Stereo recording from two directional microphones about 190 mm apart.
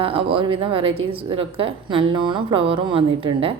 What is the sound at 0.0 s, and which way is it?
A woman's voice, 30° right (ahead or behind).